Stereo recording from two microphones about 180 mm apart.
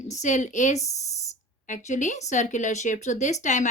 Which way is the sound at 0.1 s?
40° left (ahead or behind).